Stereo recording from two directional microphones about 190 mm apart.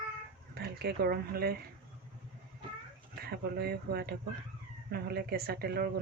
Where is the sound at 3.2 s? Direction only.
55° right (ahead or behind).